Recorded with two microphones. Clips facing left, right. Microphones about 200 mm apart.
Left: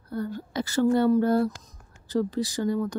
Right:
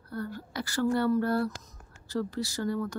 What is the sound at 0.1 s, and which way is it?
Speech, 20° left (ahead or behind).